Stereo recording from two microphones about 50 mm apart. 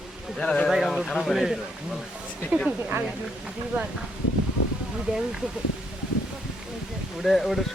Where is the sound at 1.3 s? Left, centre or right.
Centre.